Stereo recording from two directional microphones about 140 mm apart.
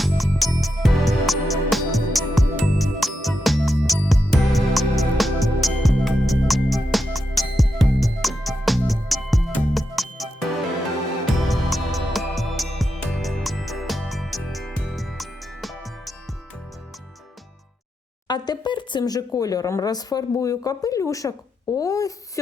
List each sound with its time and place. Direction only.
0.0 s music: centre (ahead or behind)
11.4 s music: centre (ahead or behind)
18.3 s speech: 30° left (ahead or behind)